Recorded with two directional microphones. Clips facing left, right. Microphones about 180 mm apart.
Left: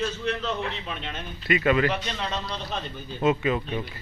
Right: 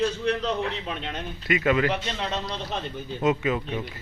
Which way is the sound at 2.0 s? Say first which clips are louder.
Right 1 dB; 25° right (ahead or behind).